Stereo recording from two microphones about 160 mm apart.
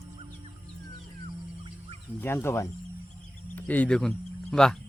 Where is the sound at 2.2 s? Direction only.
15° left (ahead or behind).